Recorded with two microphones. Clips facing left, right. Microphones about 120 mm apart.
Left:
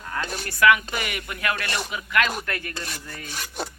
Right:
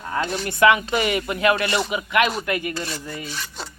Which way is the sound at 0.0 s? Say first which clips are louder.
Right 5 dB; 20° right (ahead or behind).